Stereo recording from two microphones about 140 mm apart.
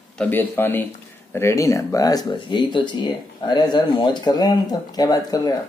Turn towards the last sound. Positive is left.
turn(degrees=25)  # may be behind; listen again after turning